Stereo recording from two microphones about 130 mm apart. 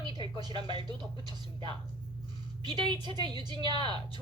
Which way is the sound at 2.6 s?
35° right (ahead or behind).